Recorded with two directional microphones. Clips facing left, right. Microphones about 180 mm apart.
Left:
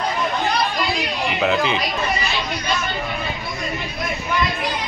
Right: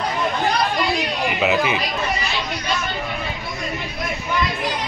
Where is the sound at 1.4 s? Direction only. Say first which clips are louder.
Even; 10° right (ahead or behind).